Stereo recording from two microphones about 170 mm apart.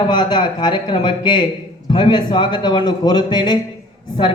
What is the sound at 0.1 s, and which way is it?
A man's voice, 25° left (ahead or behind).